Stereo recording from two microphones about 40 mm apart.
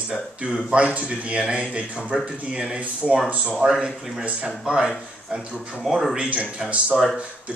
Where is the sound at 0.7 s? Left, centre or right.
Right.